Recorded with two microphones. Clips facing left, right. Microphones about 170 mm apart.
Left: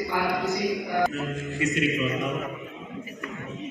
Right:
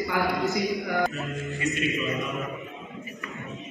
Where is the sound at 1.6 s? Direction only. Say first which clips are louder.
Left 3 dB; 75° left (ahead or behind).